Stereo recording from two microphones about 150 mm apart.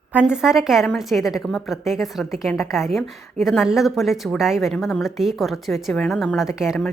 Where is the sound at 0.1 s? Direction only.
5° right (ahead or behind).